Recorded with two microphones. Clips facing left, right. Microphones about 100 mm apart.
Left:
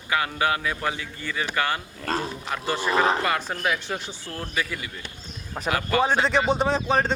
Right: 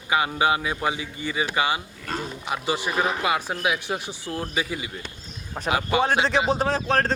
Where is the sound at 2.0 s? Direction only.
35° left (ahead or behind).